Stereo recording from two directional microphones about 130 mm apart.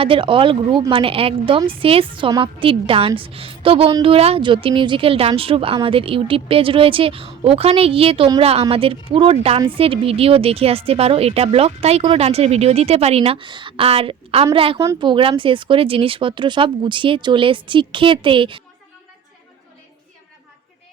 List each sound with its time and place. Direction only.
0.0 s speech: 40° right (ahead or behind)